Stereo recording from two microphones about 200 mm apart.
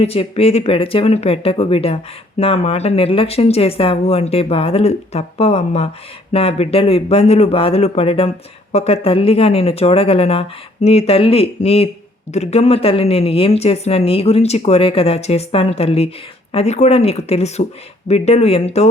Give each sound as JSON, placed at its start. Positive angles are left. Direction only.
{"t": 0.0, "sound": "speech", "side_deg": 30}